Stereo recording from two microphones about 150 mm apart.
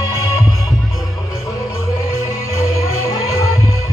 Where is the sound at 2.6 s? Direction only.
20° left (ahead or behind).